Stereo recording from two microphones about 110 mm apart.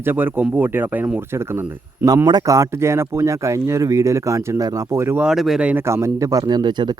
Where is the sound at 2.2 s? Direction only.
35° right (ahead or behind).